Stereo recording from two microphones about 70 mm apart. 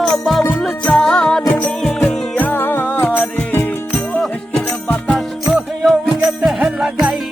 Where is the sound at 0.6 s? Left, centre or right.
Centre.